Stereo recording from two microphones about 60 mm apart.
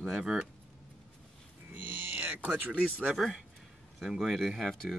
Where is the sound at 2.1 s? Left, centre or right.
Right.